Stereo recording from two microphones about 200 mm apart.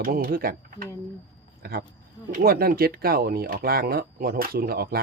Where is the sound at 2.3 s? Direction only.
50° right (ahead or behind).